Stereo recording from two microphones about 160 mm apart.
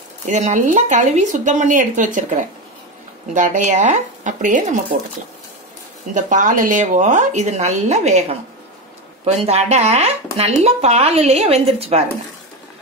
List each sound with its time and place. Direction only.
0.3 s speech: 50° right (ahead or behind)
6.1 s speech: 50° right (ahead or behind)